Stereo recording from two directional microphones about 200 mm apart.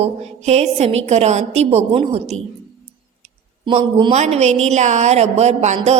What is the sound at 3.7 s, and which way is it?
A woman's voice, 25° right (ahead or behind).